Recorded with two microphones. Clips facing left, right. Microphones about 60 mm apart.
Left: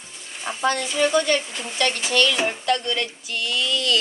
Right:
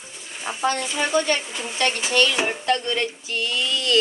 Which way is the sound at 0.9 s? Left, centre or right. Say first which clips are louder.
Left 2 dB; right.